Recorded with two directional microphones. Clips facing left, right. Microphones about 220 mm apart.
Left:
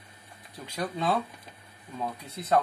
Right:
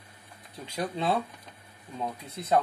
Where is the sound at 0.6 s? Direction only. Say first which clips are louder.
Even; 30° right (ahead or behind).